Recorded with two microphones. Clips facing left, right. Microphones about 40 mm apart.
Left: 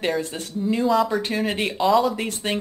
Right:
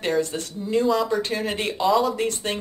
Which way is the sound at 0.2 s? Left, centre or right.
Centre.